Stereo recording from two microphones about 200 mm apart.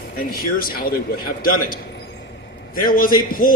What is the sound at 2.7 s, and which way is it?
Speech, 45° left (ahead or behind).